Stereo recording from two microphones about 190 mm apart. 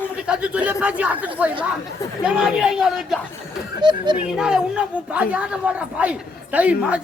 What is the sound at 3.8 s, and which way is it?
Speech, 25° right (ahead or behind).